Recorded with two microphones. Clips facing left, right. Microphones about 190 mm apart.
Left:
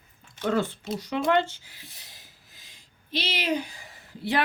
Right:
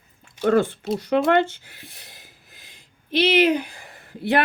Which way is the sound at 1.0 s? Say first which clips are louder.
Right 5 dB; 60° right (ahead or behind).